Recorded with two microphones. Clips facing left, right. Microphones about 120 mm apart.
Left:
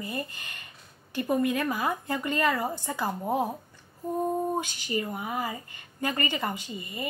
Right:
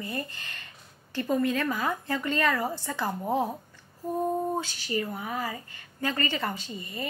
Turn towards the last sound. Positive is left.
turn(degrees=15)  # may be behind; listen again after turning